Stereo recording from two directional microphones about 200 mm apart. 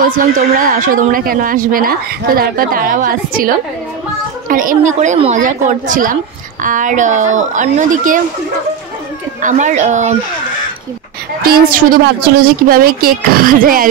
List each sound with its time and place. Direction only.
0.0 s a woman's voice: 45° right (ahead or behind)
9.4 s a woman's voice: 40° right (ahead or behind)
11.4 s a woman's voice: 45° right (ahead or behind)